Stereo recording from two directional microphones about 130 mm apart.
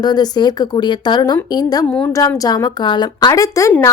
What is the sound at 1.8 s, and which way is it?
Speech, 10° left (ahead or behind).